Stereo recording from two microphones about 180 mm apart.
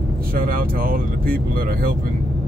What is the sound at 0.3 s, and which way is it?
Speech, 50° right (ahead or behind).